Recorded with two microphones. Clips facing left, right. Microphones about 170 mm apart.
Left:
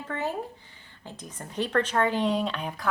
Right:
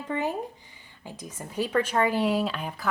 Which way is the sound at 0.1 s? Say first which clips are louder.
Right 2 dB; 15° right (ahead or behind).